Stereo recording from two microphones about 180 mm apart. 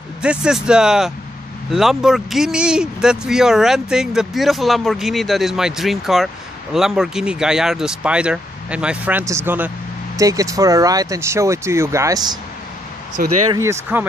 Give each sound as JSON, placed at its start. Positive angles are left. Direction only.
{"t": 0.2, "sound": "speech", "side_deg": -5}
{"t": 13.5, "sound": "speech", "side_deg": -15}